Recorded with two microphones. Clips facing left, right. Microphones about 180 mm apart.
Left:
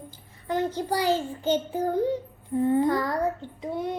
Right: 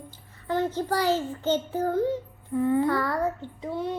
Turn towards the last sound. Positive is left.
turn(degrees=15)  # may be behind; listen again after turning